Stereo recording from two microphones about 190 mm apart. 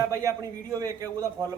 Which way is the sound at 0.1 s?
15° right (ahead or behind).